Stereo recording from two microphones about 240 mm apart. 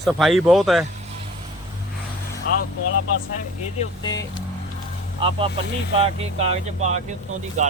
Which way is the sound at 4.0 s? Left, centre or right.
Centre.